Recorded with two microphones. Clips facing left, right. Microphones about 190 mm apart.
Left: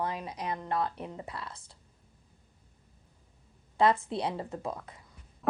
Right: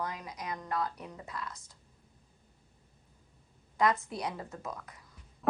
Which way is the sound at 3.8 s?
30° left (ahead or behind).